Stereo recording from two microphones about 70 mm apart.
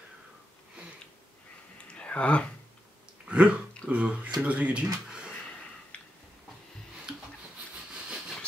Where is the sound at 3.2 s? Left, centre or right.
Centre.